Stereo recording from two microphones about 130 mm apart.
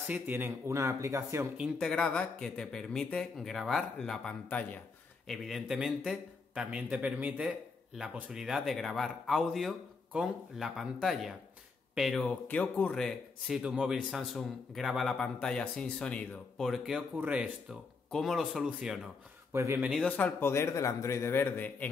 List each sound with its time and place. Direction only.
0.1 s speech: 15° right (ahead or behind)
1.6 s a man's voice: centre (ahead or behind)
19.5 s speech: 20° right (ahead or behind)
20.0 s a man's voice: 10° left (ahead or behind)